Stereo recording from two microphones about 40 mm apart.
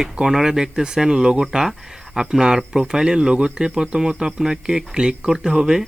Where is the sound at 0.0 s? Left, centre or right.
Centre.